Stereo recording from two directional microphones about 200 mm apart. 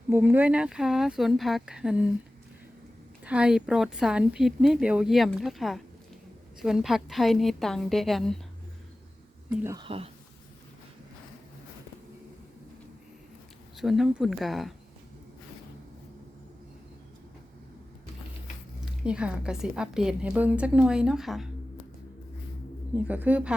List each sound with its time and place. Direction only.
0.1 s a woman's voice: 10° right (ahead or behind)
3.2 s a woman's voice: 5° right (ahead or behind)
9.7 s speech: 25° right (ahead or behind)
13.7 s a woman's voice: centre (ahead or behind)
18.9 s a woman's voice: 5° right (ahead or behind)
23.0 s speech: 10° right (ahead or behind)